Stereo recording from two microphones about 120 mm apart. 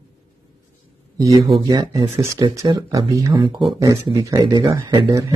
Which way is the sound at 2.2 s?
25° right (ahead or behind).